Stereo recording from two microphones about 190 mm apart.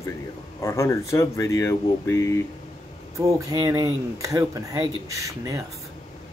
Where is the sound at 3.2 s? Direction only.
20° right (ahead or behind).